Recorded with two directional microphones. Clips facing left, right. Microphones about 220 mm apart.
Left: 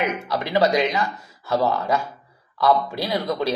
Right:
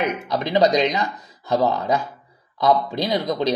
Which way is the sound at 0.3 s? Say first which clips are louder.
Right 2 dB; 20° right (ahead or behind).